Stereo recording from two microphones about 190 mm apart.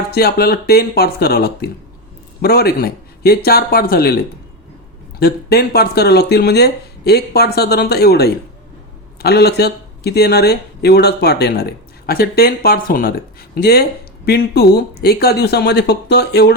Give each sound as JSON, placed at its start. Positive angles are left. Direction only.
{"t": 0.1, "sound": "speech", "side_deg": 55}
{"t": 5.2, "sound": "speech", "side_deg": 55}